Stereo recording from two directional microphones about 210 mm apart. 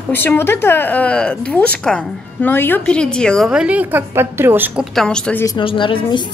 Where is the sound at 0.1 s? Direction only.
10° left (ahead or behind); by 4.8 s 10° right (ahead or behind).